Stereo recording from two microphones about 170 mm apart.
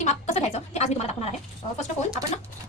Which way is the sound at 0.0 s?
40° left (ahead or behind).